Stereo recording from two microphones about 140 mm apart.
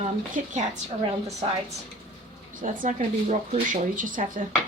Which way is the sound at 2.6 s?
65° right (ahead or behind).